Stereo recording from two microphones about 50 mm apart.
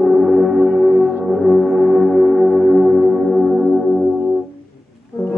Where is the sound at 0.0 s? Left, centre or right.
Centre.